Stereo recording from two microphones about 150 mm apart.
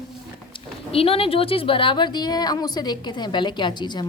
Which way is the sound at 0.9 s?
40° left (ahead or behind).